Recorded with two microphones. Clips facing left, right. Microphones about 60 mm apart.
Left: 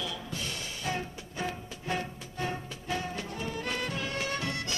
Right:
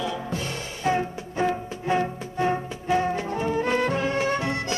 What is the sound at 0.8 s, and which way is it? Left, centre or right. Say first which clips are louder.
Music: right 11 dB; right.